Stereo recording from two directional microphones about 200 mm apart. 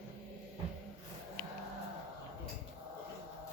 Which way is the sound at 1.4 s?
45° left (ahead or behind).